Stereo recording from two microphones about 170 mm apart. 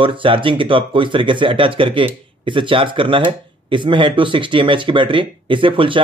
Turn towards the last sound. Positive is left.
turn(degrees=-30)  # may be behind; listen again after turning